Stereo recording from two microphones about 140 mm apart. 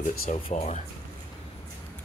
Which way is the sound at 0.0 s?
65° left (ahead or behind).